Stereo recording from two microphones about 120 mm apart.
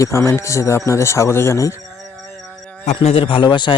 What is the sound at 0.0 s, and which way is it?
Speech, 25° left (ahead or behind).